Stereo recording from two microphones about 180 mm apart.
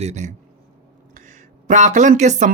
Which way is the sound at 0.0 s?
40° right (ahead or behind).